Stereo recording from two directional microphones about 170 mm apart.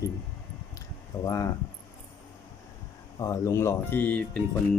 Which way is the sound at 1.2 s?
20° left (ahead or behind).